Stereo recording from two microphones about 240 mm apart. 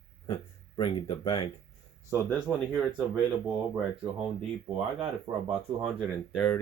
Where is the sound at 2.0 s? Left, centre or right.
Centre.